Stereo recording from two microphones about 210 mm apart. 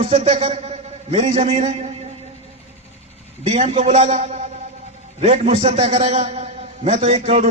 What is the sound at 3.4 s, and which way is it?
A man's voice, 30° right (ahead or behind).